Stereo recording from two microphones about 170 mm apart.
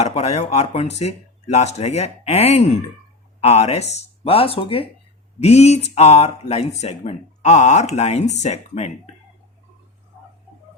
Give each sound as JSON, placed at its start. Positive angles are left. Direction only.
{"t": 0.0, "sound": "speech", "side_deg": 40}